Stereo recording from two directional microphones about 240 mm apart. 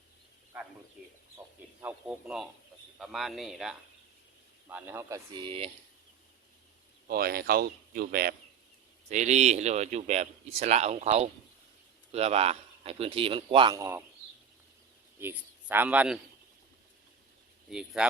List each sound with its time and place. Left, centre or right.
1.0 s speech: centre; by 5.7 s right
7.1 s speech: right; by 14.0 s centre
15.2 s a man's voice: centre
17.7 s speech: centre